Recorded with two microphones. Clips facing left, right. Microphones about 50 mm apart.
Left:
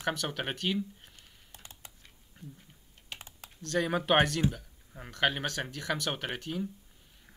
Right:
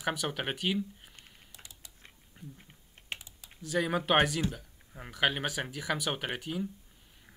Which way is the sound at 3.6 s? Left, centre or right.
Centre.